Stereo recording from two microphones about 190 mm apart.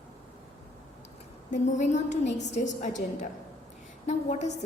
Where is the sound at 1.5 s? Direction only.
40° left (ahead or behind).